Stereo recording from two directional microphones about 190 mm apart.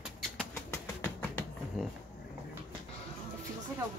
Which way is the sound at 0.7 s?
10° left (ahead or behind).